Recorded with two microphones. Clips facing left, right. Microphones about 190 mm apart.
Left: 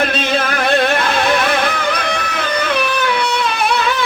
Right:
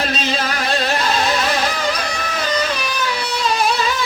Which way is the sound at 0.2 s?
55° left (ahead or behind).